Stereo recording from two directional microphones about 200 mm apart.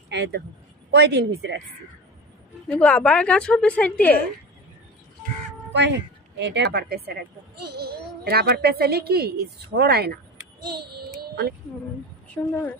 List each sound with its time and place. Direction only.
0.1 s speech: 60° right (ahead or behind)
2.6 s a woman's voice: 5° left (ahead or behind)
6.3 s a child's voice: 60° right (ahead or behind)
10.6 s child singing: 50° right (ahead or behind)
11.2 s a sound: 50° right (ahead or behind)
12.4 s a woman's voice: 5° left (ahead or behind)